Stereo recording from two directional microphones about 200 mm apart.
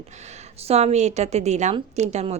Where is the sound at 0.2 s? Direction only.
35° right (ahead or behind).